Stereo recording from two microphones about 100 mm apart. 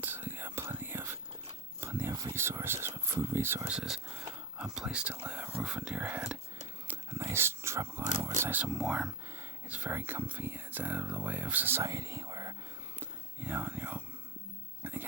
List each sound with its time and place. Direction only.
0.0 s whispering: 20° right (ahead or behind)
1.8 s a sound: 25° right (ahead or behind)
3.8 s speech: 5° right (ahead or behind)
6.8 s dog: 25° right (ahead or behind)
8.4 s speech: 20° right (ahead or behind)
8.7 s speech: 5° right (ahead or behind)
9.3 s speech: 20° right (ahead or behind)
11.8 s whispering: 35° right (ahead or behind)
13.0 s whispering: 20° right (ahead or behind)